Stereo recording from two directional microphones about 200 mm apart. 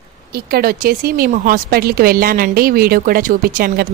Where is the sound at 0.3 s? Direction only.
50° right (ahead or behind).